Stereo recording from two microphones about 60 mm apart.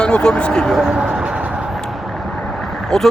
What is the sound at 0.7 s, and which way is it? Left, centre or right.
Speech, centre.